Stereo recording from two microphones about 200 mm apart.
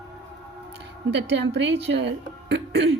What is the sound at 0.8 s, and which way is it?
Speech, 60° right (ahead or behind).